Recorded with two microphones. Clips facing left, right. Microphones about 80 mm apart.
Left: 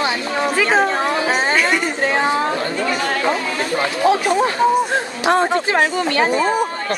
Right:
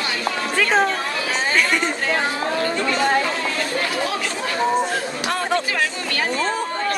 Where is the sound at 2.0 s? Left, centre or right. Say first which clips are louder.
Left 5 dB; left.